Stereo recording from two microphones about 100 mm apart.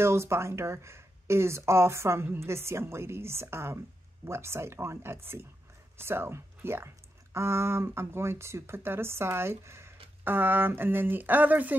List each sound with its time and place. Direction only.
0.0 s speech: 25° right (ahead or behind)